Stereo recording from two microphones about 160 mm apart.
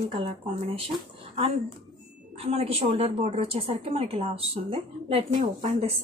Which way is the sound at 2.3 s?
40° right (ahead or behind).